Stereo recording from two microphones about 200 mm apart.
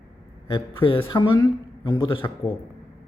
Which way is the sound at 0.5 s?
25° left (ahead or behind).